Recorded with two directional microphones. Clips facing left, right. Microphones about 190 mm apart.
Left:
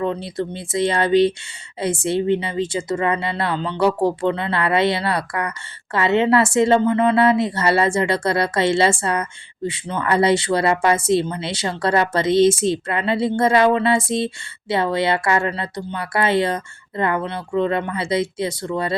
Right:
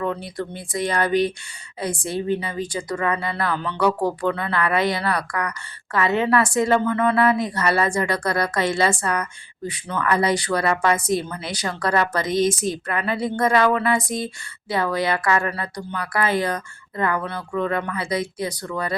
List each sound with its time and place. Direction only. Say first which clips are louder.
0.0 s speech: left 3 dB; 25° left (ahead or behind)